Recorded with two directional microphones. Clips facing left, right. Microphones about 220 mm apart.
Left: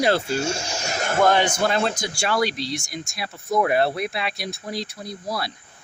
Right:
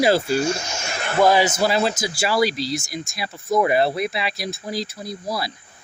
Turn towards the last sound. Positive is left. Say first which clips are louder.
# right 2 dB
turn(degrees=0)  # may be behind; listen again after turning